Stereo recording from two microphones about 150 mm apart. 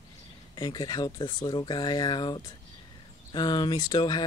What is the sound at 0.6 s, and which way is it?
Speech, 30° left (ahead or behind).